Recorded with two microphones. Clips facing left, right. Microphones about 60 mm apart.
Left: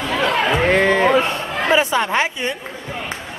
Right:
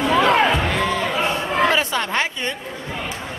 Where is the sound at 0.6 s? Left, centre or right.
Left.